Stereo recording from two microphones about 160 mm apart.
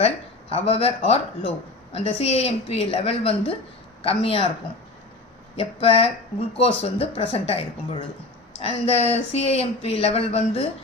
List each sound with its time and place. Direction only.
0.5 s a woman's voice: 40° left (ahead or behind)
5.5 s a woman's voice: 35° left (ahead or behind)